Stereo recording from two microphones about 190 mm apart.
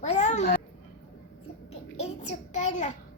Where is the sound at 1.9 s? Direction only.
35° left (ahead or behind).